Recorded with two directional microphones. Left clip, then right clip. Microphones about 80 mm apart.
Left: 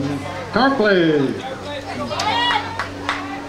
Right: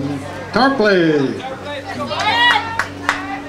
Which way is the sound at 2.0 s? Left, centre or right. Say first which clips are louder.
Right 5 dB; right.